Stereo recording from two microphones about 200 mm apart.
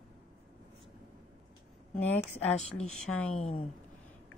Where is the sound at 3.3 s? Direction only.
35° left (ahead or behind).